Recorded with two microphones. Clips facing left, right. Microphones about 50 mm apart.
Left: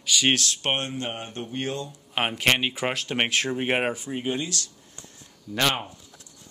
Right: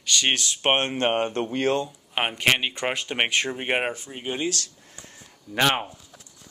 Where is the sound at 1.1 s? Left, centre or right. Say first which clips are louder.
Right 8 dB; right.